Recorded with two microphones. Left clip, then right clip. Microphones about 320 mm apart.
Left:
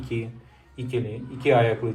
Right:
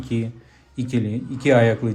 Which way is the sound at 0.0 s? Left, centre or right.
Right.